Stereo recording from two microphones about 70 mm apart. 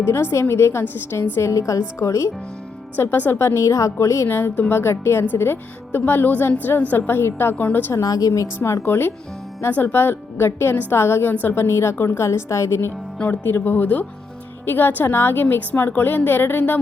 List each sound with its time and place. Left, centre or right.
0.0 s a woman's voice: left
1.4 s speech: left
2.9 s a woman's voice: left
4.3 s a woman's voice: left
4.8 s a woman's voice: left
7.9 s speech: left
8.5 s a woman's voice: left